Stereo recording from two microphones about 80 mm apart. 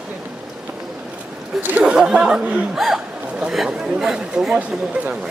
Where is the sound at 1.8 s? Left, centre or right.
Centre.